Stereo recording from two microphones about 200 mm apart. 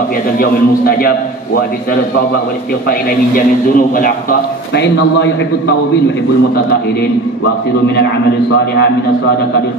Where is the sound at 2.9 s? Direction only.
45° left (ahead or behind).